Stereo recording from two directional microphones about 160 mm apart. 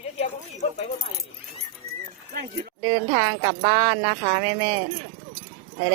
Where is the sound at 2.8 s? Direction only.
25° right (ahead or behind).